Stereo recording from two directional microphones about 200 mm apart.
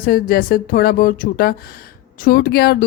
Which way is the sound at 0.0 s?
45° left (ahead or behind).